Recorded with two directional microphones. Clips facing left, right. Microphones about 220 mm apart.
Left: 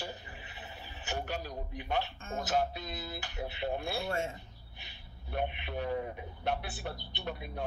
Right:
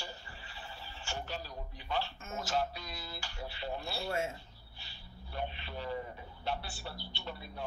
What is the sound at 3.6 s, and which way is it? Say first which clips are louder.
Speech: left 5 dB; 55° left (ahead or behind).